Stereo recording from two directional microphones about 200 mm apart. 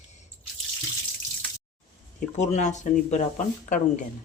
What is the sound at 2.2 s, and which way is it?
Speech, 35° left (ahead or behind).